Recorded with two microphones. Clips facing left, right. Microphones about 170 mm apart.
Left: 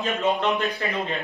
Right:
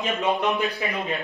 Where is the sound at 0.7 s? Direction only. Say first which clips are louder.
Even; centre (ahead or behind).